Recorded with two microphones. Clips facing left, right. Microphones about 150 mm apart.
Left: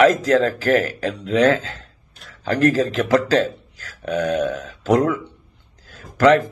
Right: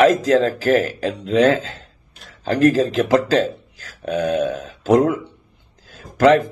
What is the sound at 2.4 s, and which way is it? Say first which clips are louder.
Speech: right 2 dB; 35° right (ahead or behind).